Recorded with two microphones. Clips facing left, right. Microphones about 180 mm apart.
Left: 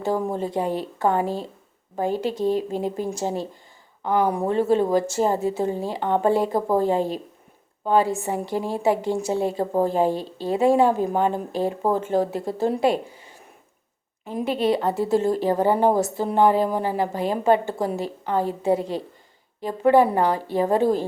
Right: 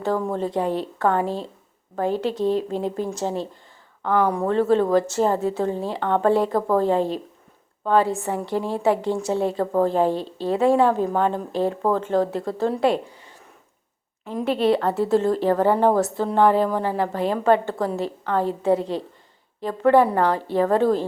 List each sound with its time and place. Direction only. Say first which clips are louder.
0.0 s a woman's voice: right 1 dB; 5° left (ahead or behind)
6.5 s a woman's voice: right 1 dB; 25° left (ahead or behind)
6.7 s a woman's voice: right 1 dB; 5° left (ahead or behind)
14.3 s a woman's voice: right 2 dB; 5° left (ahead or behind)